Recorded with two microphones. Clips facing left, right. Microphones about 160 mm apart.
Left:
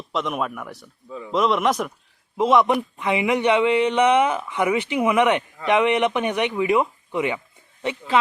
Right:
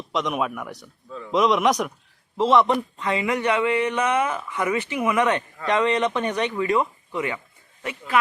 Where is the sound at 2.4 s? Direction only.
10° left (ahead or behind).